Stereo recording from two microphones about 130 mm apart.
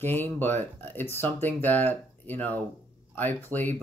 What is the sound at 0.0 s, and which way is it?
Speech, 15° left (ahead or behind).